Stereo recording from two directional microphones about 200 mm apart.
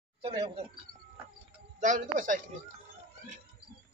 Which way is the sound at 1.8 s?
40° right (ahead or behind).